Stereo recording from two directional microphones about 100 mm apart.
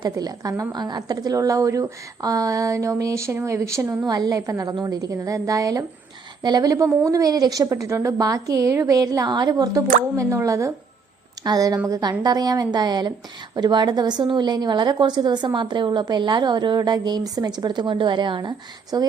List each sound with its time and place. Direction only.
0.0 s a woman's voice: 40° right (ahead or behind)
4.0 s a woman's voice: 40° right (ahead or behind)